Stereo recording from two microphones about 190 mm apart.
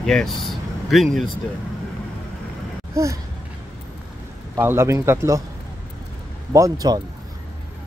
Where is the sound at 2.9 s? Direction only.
15° right (ahead or behind).